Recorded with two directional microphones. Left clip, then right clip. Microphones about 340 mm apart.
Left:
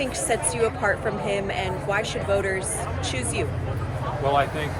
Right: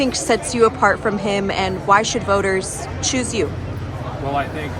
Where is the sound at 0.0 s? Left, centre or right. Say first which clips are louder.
Right 6 dB; right.